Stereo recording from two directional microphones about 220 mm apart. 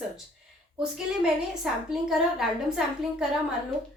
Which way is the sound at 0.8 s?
5° right (ahead or behind).